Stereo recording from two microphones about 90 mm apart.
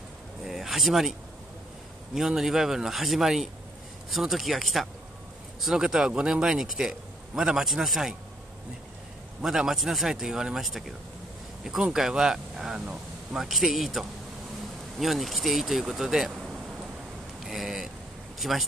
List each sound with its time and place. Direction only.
0.5 s a sound: centre (ahead or behind)
2.1 s speech: 5° right (ahead or behind)
9.4 s speech: 5° right (ahead or behind)